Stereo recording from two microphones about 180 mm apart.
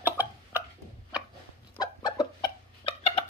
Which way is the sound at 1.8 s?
25° left (ahead or behind).